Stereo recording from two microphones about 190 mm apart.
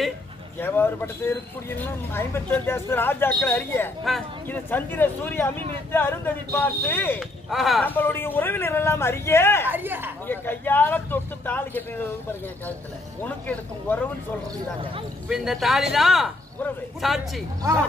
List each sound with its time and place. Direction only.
0.6 s speech: 10° left (ahead or behind)
8.0 s speech: 10° left (ahead or behind)
9.7 s speech: 10° right (ahead or behind)
10.2 s speech: 10° left (ahead or behind)
13.2 s speech: 10° left (ahead or behind)
15.2 s a man's voice: centre (ahead or behind)